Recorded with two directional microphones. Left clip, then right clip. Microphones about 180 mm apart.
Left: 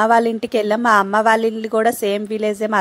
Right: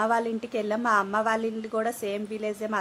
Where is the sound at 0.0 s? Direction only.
45° left (ahead or behind).